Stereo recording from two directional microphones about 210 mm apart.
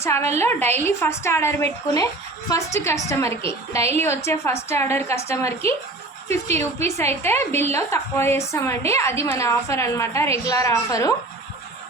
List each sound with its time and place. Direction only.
0.0 s a woman's voice: 15° left (ahead or behind)